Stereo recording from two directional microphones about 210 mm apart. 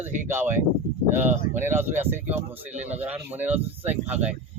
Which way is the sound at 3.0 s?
10° right (ahead or behind).